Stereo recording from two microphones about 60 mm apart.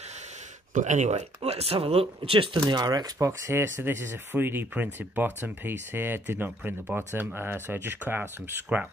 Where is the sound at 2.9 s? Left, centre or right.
Right.